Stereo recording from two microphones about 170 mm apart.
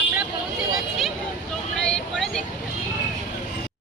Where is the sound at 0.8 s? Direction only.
Centre (ahead or behind).